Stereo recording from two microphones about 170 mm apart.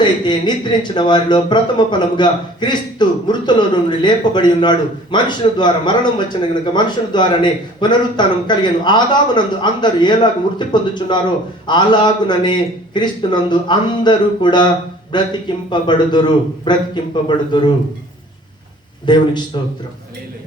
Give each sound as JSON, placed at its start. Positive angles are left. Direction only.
{"t": 0.0, "sound": "speech", "side_deg": 25}
{"t": 19.0, "sound": "speech", "side_deg": 25}